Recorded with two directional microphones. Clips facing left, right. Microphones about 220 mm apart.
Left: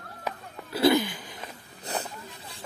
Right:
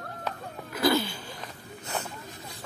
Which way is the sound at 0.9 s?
15° left (ahead or behind).